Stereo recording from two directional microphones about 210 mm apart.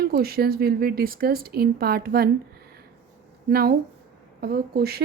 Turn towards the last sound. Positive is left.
turn(degrees=-45)  # may be behind; listen again after turning